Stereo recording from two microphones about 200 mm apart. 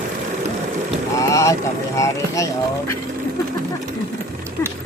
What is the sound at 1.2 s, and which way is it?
Vehicle, 15° left (ahead or behind).